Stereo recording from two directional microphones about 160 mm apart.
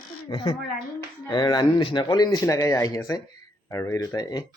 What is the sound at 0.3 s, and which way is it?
Speech, 30° left (ahead or behind).